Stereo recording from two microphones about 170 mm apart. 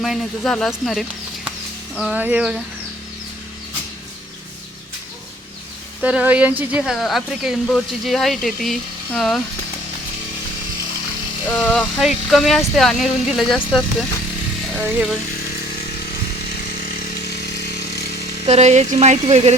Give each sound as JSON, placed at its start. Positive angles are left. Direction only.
{"t": 0.0, "sound": "speech", "side_deg": 0}
{"t": 6.0, "sound": "speech", "side_deg": -5}
{"t": 6.9, "sound": "speech", "side_deg": 0}
{"t": 11.5, "sound": "speech", "side_deg": 5}
{"t": 18.4, "sound": "a sound", "side_deg": -40}